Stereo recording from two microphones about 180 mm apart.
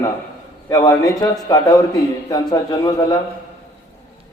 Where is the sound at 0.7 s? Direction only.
20° left (ahead or behind).